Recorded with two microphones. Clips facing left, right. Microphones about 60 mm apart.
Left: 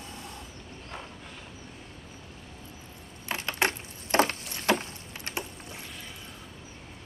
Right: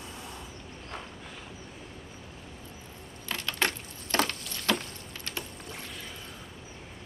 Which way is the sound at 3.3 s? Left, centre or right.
Left.